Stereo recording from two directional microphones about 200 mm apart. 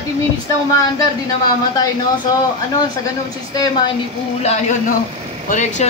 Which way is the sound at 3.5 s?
25° left (ahead or behind).